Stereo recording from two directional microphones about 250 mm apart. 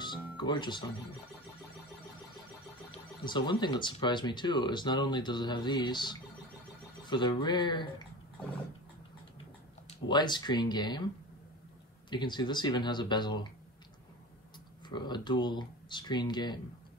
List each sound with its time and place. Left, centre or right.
0.0 s music: centre
3.3 s speech: centre
9.8 s speech: centre
12.1 s speech: centre
14.9 s speech: centre